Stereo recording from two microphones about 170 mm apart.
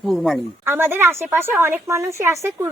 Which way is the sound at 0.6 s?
15° right (ahead or behind).